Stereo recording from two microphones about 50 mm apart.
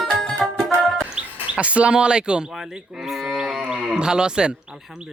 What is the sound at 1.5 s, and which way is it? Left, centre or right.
Speech, right.